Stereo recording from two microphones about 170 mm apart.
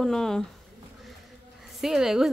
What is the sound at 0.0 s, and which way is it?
Speech, 5° left (ahead or behind).